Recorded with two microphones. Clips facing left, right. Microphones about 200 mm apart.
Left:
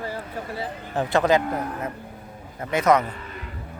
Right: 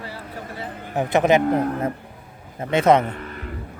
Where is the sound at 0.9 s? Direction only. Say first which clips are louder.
Right 3 dB; 20° right (ahead or behind).